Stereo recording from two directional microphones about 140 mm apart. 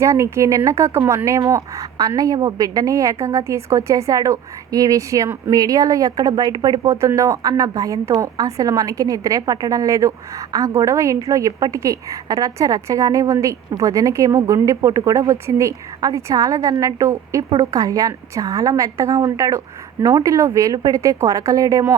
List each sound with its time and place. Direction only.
0.0 s a woman's voice: 20° right (ahead or behind)